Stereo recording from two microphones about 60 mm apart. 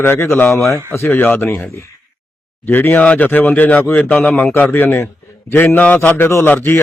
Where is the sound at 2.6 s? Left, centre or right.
Left.